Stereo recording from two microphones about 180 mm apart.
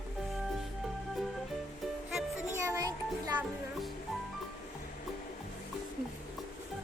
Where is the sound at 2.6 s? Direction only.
15° right (ahead or behind).